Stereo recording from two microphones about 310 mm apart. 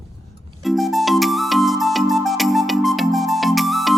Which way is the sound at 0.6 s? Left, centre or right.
Centre.